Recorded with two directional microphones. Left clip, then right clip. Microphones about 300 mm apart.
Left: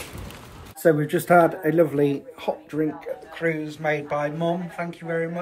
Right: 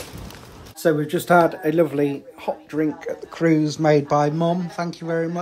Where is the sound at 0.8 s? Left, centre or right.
Centre.